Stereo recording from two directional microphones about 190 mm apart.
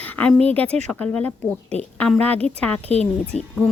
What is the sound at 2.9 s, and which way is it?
Speech, 35° left (ahead or behind).